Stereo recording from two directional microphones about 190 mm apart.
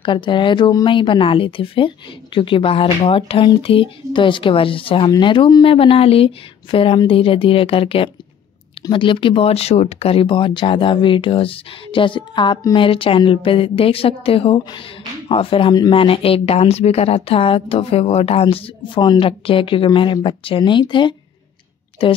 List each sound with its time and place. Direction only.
0.0 s speech: 25° left (ahead or behind)